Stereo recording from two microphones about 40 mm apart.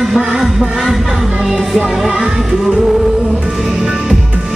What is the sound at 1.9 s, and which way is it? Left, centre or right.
Music, centre.